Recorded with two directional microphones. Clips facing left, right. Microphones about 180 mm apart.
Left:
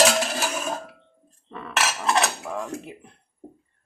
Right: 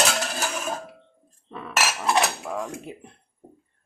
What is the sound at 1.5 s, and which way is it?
Dishes, 5° right (ahead or behind).